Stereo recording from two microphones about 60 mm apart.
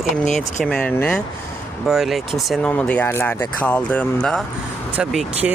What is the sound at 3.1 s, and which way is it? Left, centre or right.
Speech, left.